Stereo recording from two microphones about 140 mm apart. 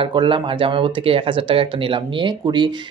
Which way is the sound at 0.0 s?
35° right (ahead or behind).